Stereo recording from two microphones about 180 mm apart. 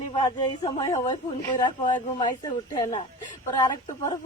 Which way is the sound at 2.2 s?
25° left (ahead or behind).